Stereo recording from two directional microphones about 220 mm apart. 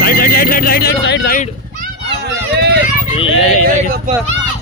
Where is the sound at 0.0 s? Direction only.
40° left (ahead or behind).